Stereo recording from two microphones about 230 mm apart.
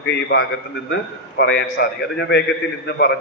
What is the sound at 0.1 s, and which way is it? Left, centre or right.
A man's voice, left.